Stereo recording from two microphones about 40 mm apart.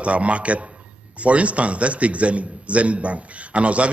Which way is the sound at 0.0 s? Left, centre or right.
Right.